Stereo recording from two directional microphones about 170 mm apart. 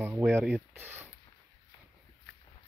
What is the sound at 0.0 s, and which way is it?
Speech, 15° right (ahead or behind).